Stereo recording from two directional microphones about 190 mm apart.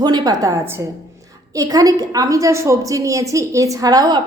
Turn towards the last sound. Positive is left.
turn(degrees=-20)  # may be behind; listen again after turning